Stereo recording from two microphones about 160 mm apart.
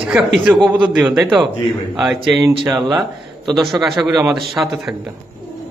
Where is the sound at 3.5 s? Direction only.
Centre (ahead or behind).